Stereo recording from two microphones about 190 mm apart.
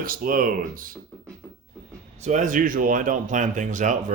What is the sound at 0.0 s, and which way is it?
Speech, 50° right (ahead or behind).